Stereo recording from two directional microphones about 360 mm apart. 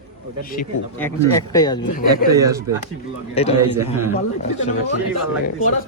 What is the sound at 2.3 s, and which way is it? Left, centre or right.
Speech, centre.